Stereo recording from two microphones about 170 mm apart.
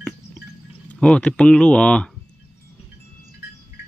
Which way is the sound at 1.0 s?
5° left (ahead or behind).